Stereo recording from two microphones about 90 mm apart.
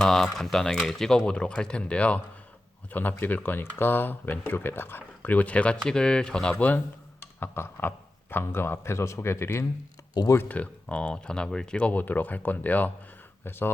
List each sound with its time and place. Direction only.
0.0 s speech: 5° left (ahead or behind); by 9.6 s 30° left (ahead or behind)
10.3 s speech: 15° left (ahead or behind)